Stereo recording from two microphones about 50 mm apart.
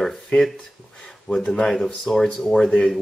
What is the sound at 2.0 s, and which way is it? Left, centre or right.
Speech, centre.